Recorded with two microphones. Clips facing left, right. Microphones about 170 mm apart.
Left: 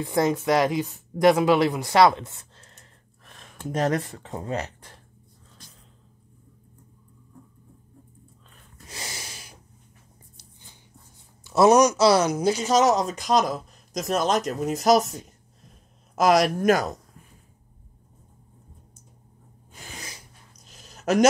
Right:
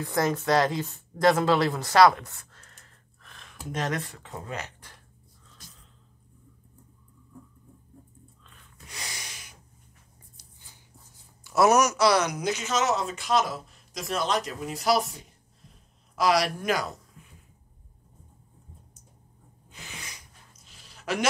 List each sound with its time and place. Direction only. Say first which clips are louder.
0.0 s speech: left 4 dB; 20° left (ahead or behind)
8.5 s snort: left 4 dB; 35° left (ahead or behind)
11.4 s a man's voice: left 4 dB; 25° left (ahead or behind); by 17.3 s 45° left (ahead or behind)
19.7 s a sound: left 3 dB; 45° left (ahead or behind)